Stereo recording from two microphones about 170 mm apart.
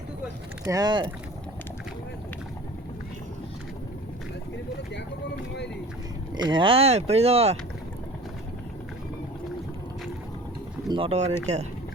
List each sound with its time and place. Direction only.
0.6 s speech: 20° right (ahead or behind)
6.3 s speech: 25° right (ahead or behind)
10.8 s speech: 30° right (ahead or behind)